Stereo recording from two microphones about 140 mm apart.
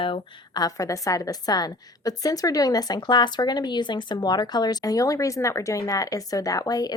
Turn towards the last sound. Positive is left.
turn(degrees=25)  # may be behind; listen again after turning